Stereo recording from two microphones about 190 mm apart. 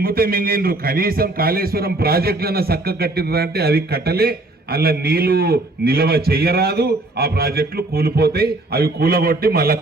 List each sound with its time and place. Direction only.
0.0 s a man's voice: 50° right (ahead or behind)